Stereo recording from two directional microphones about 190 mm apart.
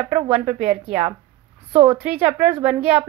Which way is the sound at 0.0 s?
35° right (ahead or behind).